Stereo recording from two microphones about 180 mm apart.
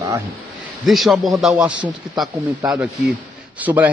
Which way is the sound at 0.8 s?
Centre (ahead or behind).